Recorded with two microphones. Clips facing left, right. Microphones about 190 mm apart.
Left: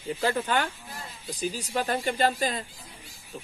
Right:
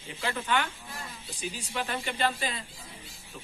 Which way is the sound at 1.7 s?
40° left (ahead or behind).